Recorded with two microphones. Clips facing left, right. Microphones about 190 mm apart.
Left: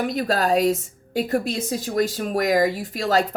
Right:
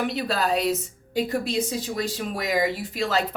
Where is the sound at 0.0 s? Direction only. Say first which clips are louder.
Left 3 dB; 40° left (ahead or behind).